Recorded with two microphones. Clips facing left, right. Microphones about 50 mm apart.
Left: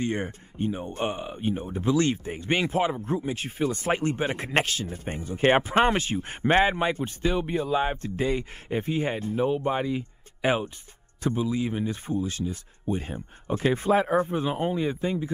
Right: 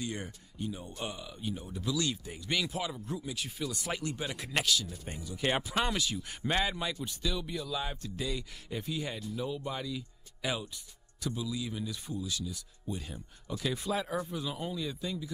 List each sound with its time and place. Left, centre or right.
0.0 s speech: left